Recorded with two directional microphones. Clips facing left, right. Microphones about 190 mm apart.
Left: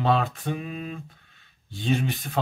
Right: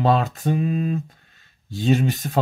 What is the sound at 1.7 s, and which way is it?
Speech, 40° right (ahead or behind).